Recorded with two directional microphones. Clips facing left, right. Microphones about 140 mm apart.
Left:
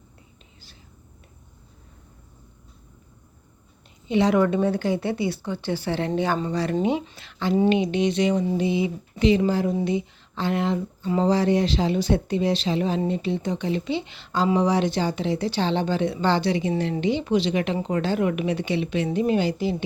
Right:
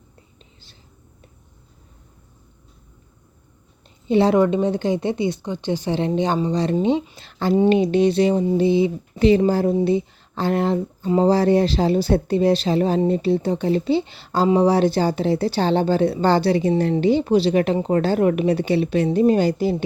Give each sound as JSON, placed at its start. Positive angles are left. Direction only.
{"t": 4.1, "sound": "speech", "side_deg": -35}
{"t": 4.4, "sound": "speech", "side_deg": -20}
{"t": 7.2, "sound": "speech", "side_deg": -40}
{"t": 9.8, "sound": "a sound", "side_deg": -35}
{"t": 11.1, "sound": "speech", "side_deg": -35}